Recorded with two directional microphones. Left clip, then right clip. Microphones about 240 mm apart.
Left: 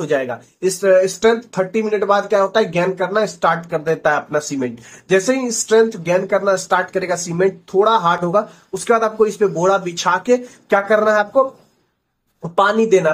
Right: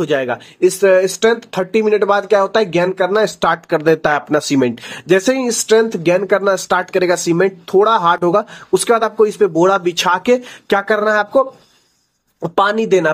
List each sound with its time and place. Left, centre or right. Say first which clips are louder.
0.0 s speech: right 2 dB; right
12.4 s speech: even; right